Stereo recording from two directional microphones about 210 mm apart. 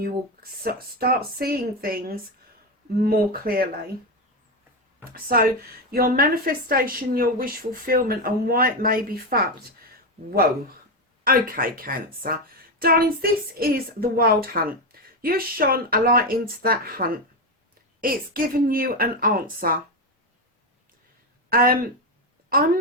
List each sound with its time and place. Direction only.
0.6 s a woman's voice: 45° right (ahead or behind)
5.1 s a woman's voice: 45° right (ahead or behind)
11.2 s a woman's voice: 45° right (ahead or behind)
21.5 s speech: 45° right (ahead or behind)